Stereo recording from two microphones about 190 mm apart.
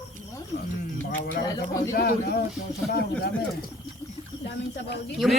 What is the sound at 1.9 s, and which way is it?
Speech, 50° left (ahead or behind).